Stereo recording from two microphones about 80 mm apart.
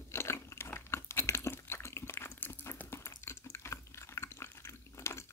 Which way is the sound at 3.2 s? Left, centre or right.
Left.